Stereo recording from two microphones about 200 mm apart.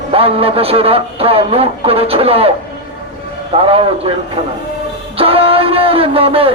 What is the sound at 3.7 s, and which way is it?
Speech, 25° right (ahead or behind).